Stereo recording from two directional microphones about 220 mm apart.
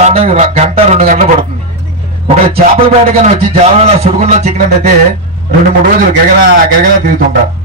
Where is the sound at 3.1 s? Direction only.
30° right (ahead or behind).